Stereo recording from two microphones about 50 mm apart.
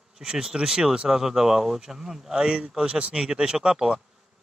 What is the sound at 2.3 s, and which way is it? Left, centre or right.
Speech, centre.